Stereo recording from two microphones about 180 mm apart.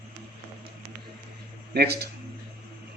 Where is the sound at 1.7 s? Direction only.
60° right (ahead or behind).